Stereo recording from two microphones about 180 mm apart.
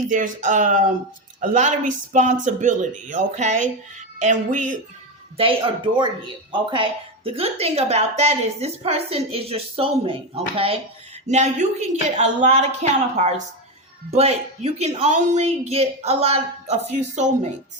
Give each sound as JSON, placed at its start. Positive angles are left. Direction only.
{"t": 0.1, "sound": "speech", "side_deg": -45}
{"t": 5.4, "sound": "a woman's voice", "side_deg": -30}